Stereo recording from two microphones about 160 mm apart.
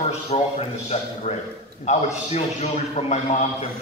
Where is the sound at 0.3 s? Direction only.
40° left (ahead or behind).